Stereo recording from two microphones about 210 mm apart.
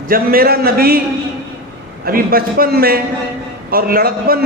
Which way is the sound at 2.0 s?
45° right (ahead or behind).